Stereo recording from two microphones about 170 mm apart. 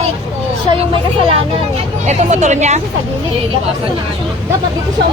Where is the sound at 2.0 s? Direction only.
45° right (ahead or behind).